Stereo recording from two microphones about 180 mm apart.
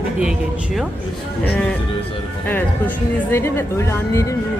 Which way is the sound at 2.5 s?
10° left (ahead or behind).